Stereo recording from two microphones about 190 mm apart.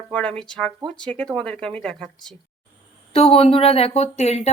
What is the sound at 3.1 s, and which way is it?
Speech, 30° left (ahead or behind).